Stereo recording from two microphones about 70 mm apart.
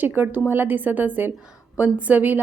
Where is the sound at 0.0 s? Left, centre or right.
Right.